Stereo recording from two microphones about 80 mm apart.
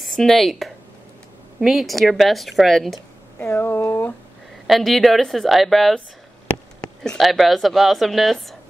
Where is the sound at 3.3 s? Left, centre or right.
Left.